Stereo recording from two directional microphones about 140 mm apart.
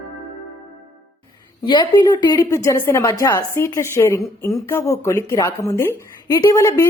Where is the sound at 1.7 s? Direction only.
30° left (ahead or behind).